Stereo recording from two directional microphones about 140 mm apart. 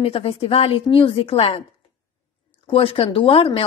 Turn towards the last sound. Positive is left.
turn(degrees=40)  # may be behind; listen again after turning